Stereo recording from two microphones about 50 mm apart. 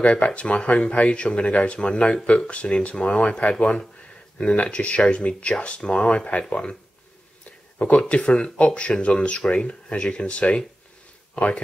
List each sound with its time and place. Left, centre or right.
0.0 s speech: left
7.4 s a sound: left
8.1 s speech: left